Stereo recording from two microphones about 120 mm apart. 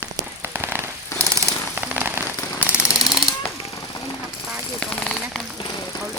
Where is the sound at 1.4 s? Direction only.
15° right (ahead or behind).